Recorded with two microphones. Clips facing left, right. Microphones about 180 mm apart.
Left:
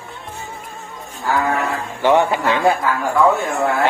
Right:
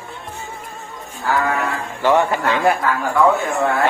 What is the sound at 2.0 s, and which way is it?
Speech, 20° left (ahead or behind).